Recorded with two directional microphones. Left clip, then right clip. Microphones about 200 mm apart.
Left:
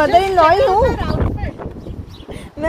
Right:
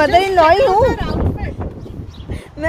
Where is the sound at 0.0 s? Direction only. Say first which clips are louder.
Even; 15° right (ahead or behind).